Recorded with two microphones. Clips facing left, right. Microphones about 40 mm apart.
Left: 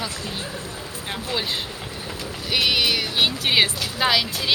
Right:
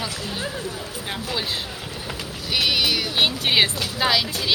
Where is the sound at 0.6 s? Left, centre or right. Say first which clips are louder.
Right 2 dB; left.